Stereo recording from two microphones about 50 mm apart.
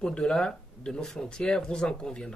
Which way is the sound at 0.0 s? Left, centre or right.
Centre.